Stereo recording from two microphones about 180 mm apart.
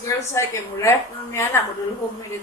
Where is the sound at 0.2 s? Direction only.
15° left (ahead or behind).